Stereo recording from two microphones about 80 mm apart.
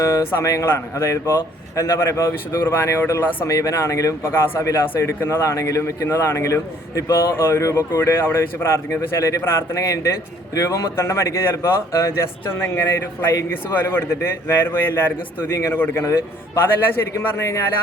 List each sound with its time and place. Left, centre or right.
0.0 s a man's voice: left